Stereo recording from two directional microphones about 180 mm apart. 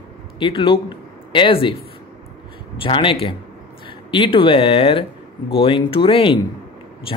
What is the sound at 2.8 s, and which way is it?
Speech, 30° left (ahead or behind).